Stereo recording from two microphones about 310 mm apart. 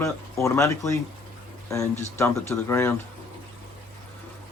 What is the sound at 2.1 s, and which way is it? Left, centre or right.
Speech, centre.